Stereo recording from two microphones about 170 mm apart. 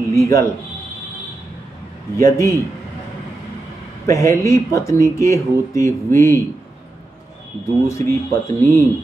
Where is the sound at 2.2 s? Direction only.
20° left (ahead or behind).